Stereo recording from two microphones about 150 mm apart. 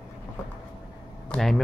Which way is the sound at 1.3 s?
Centre (ahead or behind).